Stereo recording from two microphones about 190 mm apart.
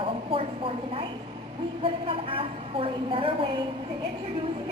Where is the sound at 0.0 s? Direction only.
30° right (ahead or behind).